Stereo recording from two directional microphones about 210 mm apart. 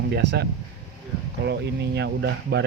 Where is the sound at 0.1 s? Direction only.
55° right (ahead or behind).